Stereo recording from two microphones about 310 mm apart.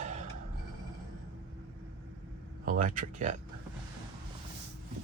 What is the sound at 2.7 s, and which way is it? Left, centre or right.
Speech, right.